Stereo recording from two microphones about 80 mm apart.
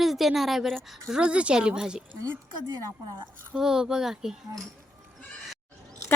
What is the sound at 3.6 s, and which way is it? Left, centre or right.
Speech, centre.